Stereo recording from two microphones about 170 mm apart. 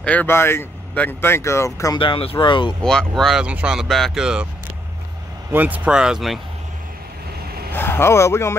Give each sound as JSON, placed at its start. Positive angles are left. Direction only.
{"t": 0.0, "sound": "speech", "side_deg": 10}
{"t": 2.0, "sound": "speech", "side_deg": 30}
{"t": 2.8, "sound": "speech", "side_deg": 5}
{"t": 5.5, "sound": "speech", "side_deg": -10}
{"t": 7.7, "sound": "speech", "side_deg": 15}